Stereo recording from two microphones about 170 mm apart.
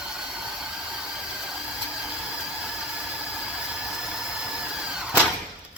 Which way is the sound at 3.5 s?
5° right (ahead or behind).